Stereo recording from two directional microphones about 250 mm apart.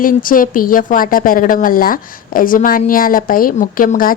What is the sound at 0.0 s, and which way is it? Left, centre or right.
Speech, left.